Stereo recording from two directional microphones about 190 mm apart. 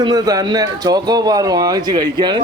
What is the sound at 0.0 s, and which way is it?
Speech, 20° right (ahead or behind).